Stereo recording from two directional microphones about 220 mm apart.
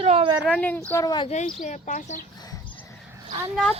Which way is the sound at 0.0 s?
25° right (ahead or behind).